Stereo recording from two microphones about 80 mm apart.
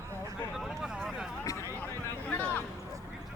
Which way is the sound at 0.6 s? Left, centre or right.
Centre.